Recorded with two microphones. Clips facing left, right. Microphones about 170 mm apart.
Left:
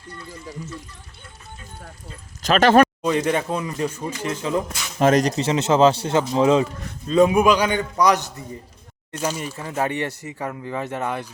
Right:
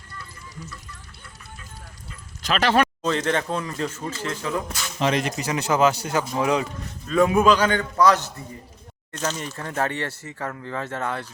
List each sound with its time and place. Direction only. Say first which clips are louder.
2.4 s speech: left 6 dB; 45° left (ahead or behind)
3.0 s speech: left 3 dB; 10° left (ahead or behind)
4.9 s speech: left 6 dB; 45° left (ahead or behind)
5.4 s speech: left 4 dB; 25° left (ahead or behind)